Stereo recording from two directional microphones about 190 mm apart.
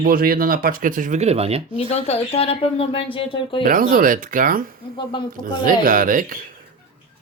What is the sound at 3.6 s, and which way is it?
Speech, 50° right (ahead or behind).